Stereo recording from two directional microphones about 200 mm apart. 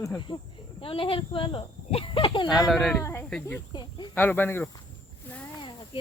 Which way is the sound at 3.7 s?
20° left (ahead or behind).